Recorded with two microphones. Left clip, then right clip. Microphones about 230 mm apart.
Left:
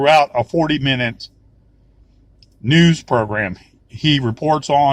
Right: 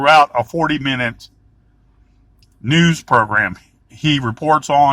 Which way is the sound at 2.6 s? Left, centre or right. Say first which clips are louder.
Left 1 dB; right.